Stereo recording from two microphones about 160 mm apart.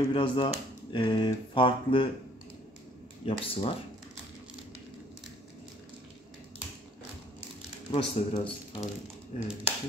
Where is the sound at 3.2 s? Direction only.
35° left (ahead or behind).